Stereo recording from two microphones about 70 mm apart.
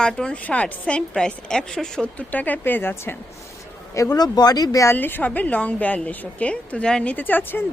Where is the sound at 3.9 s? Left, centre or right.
Left.